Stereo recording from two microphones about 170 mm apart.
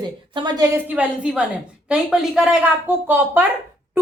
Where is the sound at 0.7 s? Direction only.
10° right (ahead or behind).